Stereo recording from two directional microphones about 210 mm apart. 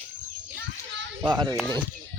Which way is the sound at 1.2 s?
20° right (ahead or behind).